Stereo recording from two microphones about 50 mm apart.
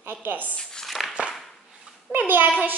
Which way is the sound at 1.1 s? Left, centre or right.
Centre.